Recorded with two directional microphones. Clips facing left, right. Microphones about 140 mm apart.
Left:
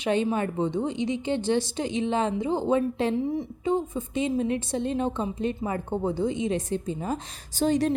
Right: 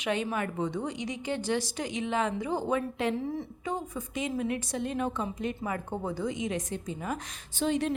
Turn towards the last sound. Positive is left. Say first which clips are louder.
# left 5 dB
turn(degrees=40)  # may be behind; listen again after turning